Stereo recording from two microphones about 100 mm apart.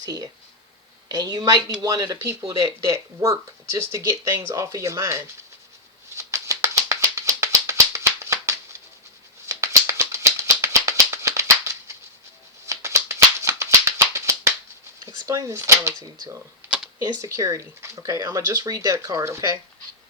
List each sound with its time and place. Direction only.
0.0 s a woman's voice: 40° right (ahead or behind)
6.1 s music: 30° right (ahead or behind)
15.0 s speech: 35° right (ahead or behind)
16.0 s speech: 40° right (ahead or behind)